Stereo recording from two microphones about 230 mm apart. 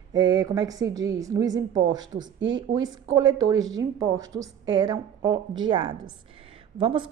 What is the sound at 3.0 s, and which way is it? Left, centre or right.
A woman's voice, centre.